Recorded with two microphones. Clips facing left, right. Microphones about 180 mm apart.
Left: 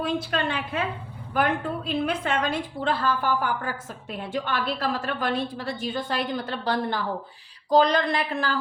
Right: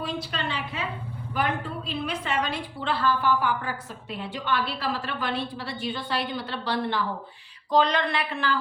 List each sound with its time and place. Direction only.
0.0 s a woman's voice: 55° left (ahead or behind)